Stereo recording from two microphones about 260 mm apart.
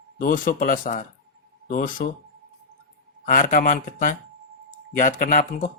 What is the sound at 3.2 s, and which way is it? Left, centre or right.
Speech, left.